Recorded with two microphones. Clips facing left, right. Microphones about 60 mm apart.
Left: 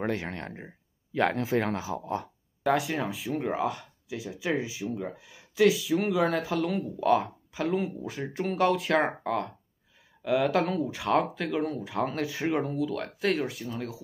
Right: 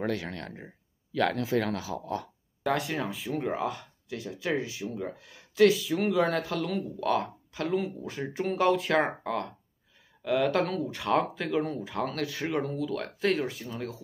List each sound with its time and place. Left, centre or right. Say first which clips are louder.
0.0 s speech: left 1 dB; left
2.6 s speech: left 3 dB; centre
12.1 s speech: left 2 dB; centre